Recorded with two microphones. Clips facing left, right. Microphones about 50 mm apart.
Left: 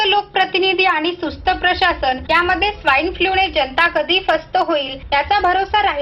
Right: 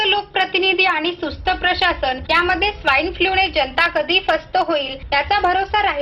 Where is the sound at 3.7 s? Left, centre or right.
Centre.